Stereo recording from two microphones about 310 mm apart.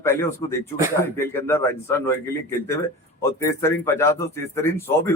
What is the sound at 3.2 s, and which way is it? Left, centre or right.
A man's voice, centre.